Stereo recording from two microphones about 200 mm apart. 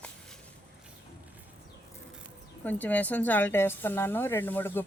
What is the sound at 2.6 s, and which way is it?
A woman's voice, 10° left (ahead or behind).